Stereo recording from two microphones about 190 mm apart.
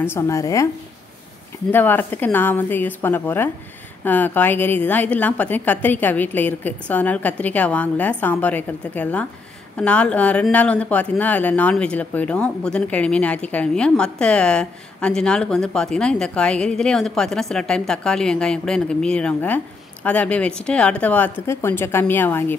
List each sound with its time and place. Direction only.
0.0 s a woman's voice: 15° left (ahead or behind)
1.7 s a woman's voice: 10° left (ahead or behind)